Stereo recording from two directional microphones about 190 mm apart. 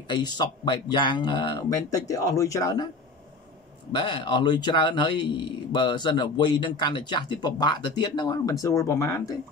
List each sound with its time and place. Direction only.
0.1 s speech: 20° left (ahead or behind)
3.9 s speech: 25° left (ahead or behind)